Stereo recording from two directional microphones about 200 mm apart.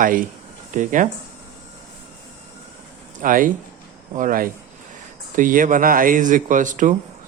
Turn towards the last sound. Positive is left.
turn(degrees=-40)  # may be behind; listen again after turning